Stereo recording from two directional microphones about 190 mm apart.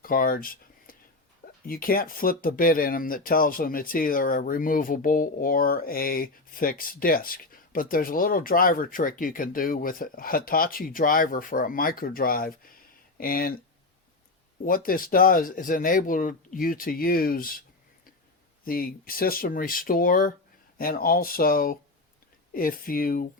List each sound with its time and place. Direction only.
0.0 s a sound: 50° left (ahead or behind)
1.6 s speech: 50° left (ahead or behind)
14.6 s speech: 50° left (ahead or behind)
18.6 s speech: 50° left (ahead or behind)